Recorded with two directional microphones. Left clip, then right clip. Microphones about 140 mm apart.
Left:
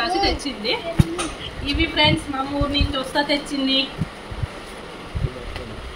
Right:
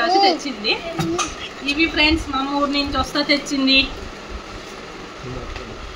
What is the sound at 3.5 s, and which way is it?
Speech, 25° right (ahead or behind).